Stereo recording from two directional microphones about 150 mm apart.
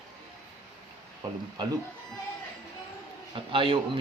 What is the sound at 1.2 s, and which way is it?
Speech, 30° right (ahead or behind).